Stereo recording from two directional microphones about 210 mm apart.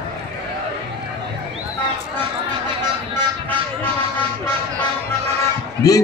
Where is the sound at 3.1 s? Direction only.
10° left (ahead or behind).